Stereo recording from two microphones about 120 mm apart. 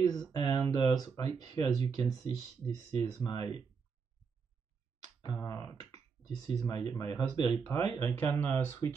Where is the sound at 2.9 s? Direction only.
30° left (ahead or behind).